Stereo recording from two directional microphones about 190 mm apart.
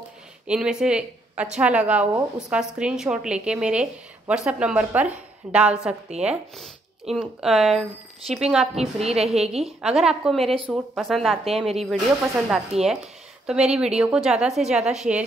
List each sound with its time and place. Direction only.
0.5 s speech: 5° right (ahead or behind)
8.7 s a woman's voice: 35° right (ahead or behind)
9.8 s speech: 5° right (ahead or behind)